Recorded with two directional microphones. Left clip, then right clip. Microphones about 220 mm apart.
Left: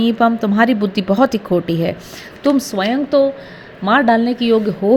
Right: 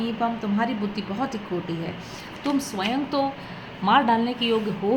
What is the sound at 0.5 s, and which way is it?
A woman's voice, 45° left (ahead or behind).